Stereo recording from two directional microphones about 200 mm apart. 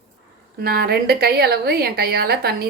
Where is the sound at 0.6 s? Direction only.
50° right (ahead or behind).